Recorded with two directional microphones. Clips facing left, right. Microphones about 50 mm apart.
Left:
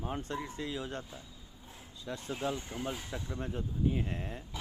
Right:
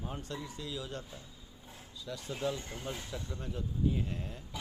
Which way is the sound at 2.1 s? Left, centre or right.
Left.